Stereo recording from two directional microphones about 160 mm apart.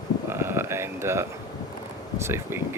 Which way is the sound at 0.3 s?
15° right (ahead or behind).